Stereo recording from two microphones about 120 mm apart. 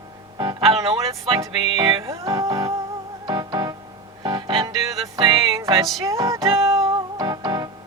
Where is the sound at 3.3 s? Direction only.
35° right (ahead or behind).